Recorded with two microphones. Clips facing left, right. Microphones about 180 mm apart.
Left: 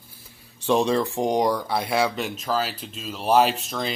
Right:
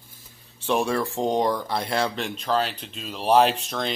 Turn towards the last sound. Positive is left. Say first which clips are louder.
# right 1 dB
turn(degrees=0)  # may be behind; listen again after turning